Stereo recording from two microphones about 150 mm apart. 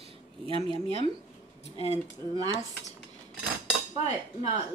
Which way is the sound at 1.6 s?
45° left (ahead or behind).